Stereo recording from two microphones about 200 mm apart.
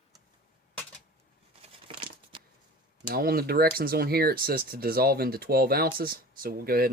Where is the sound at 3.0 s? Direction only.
50° right (ahead or behind).